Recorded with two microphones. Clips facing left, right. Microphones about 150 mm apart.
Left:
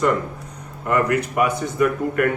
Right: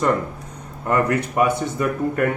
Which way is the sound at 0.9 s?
30° right (ahead or behind).